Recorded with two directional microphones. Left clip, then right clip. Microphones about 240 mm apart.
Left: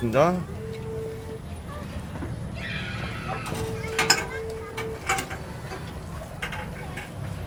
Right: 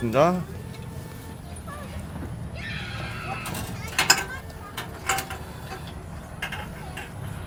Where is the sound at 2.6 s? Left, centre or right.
Right.